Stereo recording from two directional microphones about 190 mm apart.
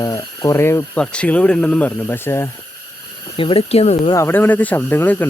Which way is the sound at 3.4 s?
30° left (ahead or behind).